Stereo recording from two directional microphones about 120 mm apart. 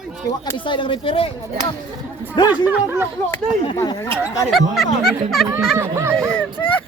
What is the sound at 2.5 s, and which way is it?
Speech, 15° right (ahead or behind).